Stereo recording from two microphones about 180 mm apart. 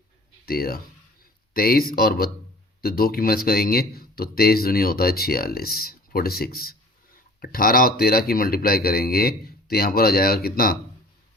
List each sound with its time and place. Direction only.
0.4 s speech: 55° left (ahead or behind)